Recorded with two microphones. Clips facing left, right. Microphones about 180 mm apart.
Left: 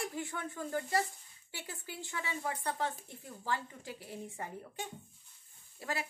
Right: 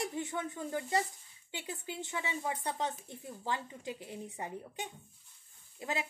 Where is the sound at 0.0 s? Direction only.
20° right (ahead or behind).